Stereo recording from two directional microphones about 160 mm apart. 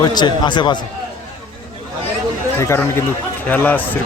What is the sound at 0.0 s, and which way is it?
Speech, 25° left (ahead or behind).